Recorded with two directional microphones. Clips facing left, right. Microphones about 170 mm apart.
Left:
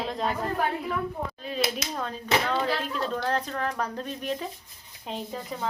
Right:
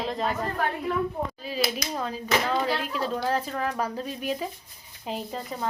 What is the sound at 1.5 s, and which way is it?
Speech, 5° right (ahead or behind).